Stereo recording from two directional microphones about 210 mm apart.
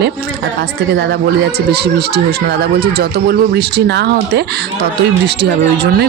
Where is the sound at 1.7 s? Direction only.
50° right (ahead or behind).